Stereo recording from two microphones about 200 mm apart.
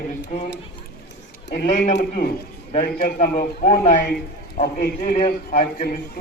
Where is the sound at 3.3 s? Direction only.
30° left (ahead or behind).